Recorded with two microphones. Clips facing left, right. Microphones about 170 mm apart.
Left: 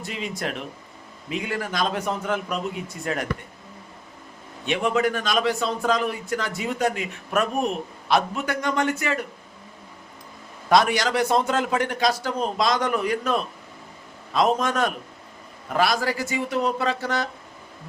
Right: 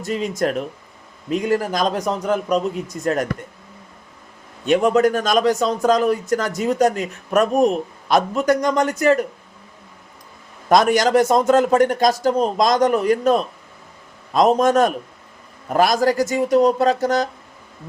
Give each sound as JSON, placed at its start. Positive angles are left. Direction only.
{"t": 0.0, "sound": "a man's voice", "side_deg": -45}
{"t": 4.6, "sound": "a man's voice", "side_deg": -45}
{"t": 10.7, "sound": "a man's voice", "side_deg": -45}